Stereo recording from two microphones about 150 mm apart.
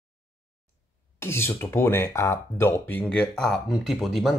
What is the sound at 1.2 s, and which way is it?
Speech, 15° left (ahead or behind).